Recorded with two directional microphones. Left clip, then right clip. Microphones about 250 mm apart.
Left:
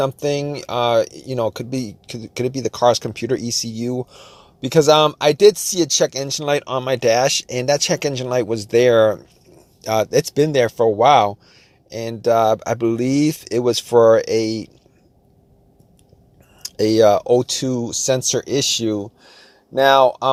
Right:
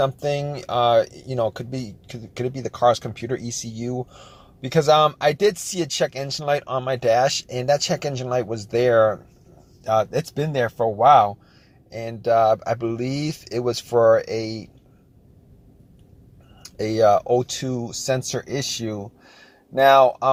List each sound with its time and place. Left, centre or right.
0.0 s speech: left
16.6 s speech: left